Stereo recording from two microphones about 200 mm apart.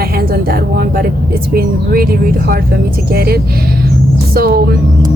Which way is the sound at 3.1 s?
50° right (ahead or behind).